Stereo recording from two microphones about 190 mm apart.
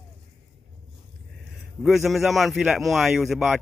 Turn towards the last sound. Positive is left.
turn(degrees=0)  # may be behind; listen again after turning